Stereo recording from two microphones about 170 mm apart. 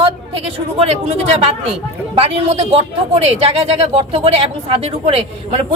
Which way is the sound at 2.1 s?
35° right (ahead or behind).